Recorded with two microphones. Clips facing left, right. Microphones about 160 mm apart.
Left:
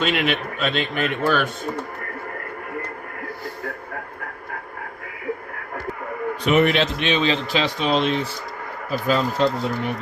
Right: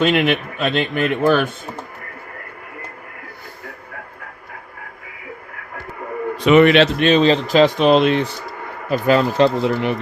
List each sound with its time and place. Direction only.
0.0 s speech: 50° right (ahead or behind)
6.4 s a man's voice: 90° right
7.0 s speech: 40° right (ahead or behind)
7.8 s speech: 65° right (ahead or behind); by 10.0 s 90° right